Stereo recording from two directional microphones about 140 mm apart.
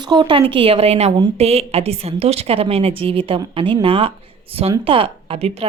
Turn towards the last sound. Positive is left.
turn(degrees=-45)  # may be behind; listen again after turning